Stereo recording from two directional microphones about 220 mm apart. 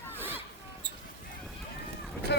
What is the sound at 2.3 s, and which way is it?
Vehicle, 50° left (ahead or behind).